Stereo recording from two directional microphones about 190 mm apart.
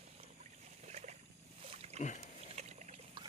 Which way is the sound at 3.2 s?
25° right (ahead or behind).